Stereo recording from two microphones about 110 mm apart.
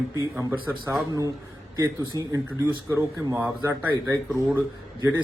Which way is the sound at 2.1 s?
30° right (ahead or behind).